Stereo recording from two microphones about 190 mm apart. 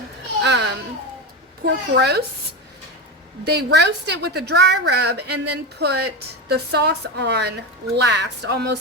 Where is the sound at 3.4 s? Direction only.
60° right (ahead or behind).